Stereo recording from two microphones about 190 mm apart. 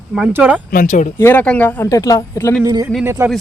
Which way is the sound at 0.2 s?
10° right (ahead or behind).